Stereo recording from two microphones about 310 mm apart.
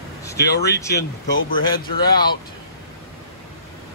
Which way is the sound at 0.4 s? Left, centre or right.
Left.